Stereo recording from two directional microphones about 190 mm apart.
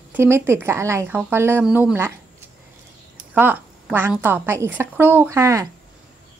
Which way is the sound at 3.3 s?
10° right (ahead or behind).